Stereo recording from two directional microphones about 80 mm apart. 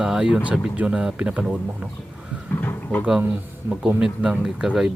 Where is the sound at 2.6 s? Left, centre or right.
Left.